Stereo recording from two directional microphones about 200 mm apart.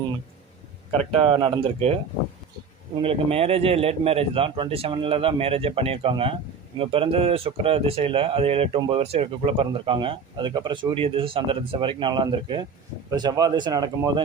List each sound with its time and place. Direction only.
0.9 s speech: 30° right (ahead or behind)
3.0 s speech: 30° right (ahead or behind)